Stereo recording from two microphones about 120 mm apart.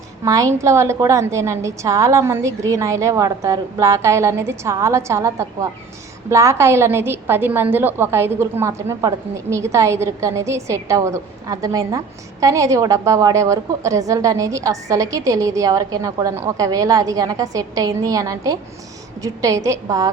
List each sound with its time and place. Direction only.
0.3 s a woman's voice: 25° right (ahead or behind)